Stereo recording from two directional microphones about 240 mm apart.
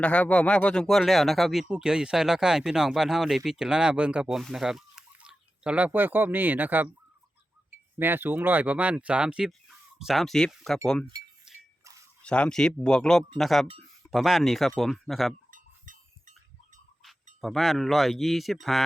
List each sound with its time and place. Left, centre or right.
0.0 s speech: centre
7.9 s speech: centre
11.5 s a sound: centre
12.2 s speech: centre
15.4 s a sound: right
17.4 s speech: centre